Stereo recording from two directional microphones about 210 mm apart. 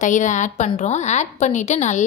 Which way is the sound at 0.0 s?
35° left (ahead or behind).